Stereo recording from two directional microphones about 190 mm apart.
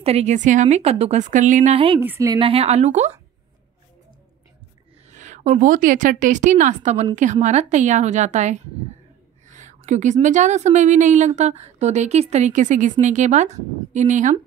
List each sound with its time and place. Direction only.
0.0 s a woman's voice: 35° right (ahead or behind)
2.0 s a woman's voice: 15° right (ahead or behind)
2.3 s a woman's voice: 30° right (ahead or behind)
5.1 s a woman's voice: 40° right (ahead or behind)